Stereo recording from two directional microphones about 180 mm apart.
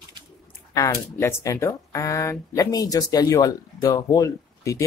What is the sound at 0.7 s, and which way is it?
Speech, 15° left (ahead or behind).